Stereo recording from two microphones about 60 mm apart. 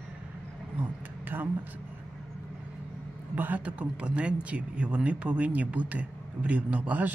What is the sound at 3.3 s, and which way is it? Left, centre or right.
Speech, right.